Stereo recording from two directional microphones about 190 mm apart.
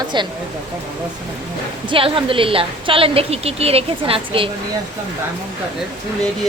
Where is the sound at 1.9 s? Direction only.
25° right (ahead or behind).